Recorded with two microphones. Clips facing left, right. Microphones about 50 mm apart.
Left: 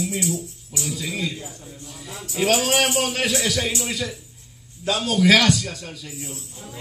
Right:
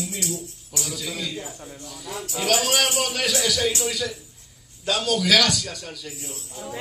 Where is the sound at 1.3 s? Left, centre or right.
Right.